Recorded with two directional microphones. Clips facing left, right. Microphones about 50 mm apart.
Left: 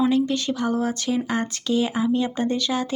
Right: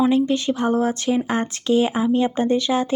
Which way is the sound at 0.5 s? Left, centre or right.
Right.